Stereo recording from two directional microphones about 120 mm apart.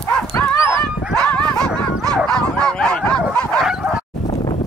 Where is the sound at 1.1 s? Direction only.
10° left (ahead or behind).